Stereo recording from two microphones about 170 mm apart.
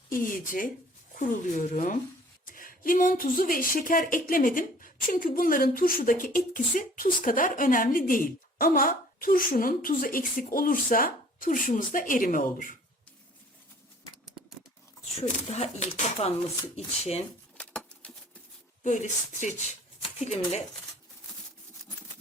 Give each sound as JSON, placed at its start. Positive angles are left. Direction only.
{"t": 0.1, "sound": "speech", "side_deg": 55}
{"t": 15.2, "sound": "speech", "side_deg": 40}
{"t": 17.6, "sound": "bird", "side_deg": 5}
{"t": 18.8, "sound": "speech", "side_deg": 45}